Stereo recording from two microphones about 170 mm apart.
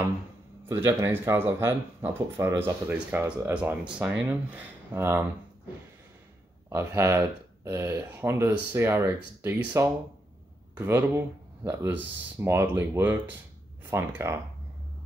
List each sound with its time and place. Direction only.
0.7 s speech: 15° right (ahead or behind)
6.7 s speech: 15° right (ahead or behind)